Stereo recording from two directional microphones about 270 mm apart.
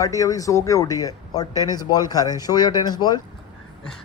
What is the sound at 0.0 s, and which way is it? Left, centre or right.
Speech, centre.